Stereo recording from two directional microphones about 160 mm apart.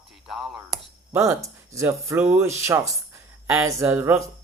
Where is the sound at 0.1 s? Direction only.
Centre (ahead or behind).